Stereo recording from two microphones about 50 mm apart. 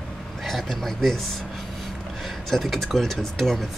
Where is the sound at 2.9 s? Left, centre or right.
Centre.